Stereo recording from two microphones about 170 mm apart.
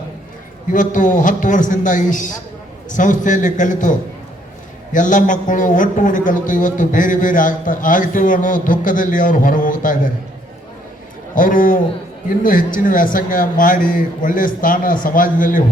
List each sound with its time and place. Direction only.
0.7 s a man's voice: 50° left (ahead or behind)
11.3 s a man's voice: 50° left (ahead or behind)